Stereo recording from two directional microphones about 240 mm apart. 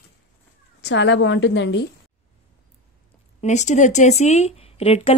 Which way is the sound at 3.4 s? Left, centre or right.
Left.